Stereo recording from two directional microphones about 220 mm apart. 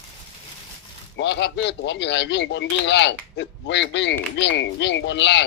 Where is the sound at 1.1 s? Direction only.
55° left (ahead or behind).